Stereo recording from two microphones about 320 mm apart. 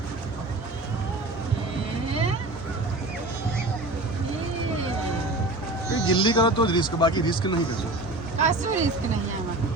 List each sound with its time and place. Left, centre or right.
6.1 s speech: centre
8.4 s speech: right